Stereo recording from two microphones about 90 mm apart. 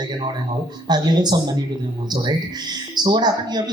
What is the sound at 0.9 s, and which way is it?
Speech, 50° right (ahead or behind).